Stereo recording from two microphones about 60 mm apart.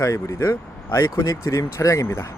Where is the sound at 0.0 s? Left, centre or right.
Left.